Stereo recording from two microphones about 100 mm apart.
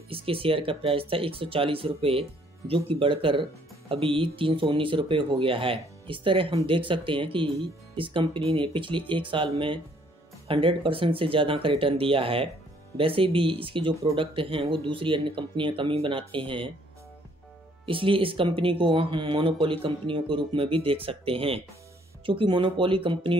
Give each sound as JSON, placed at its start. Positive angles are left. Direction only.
{"t": 0.1, "sound": "speech", "side_deg": -65}
{"t": 17.8, "sound": "speech", "side_deg": -60}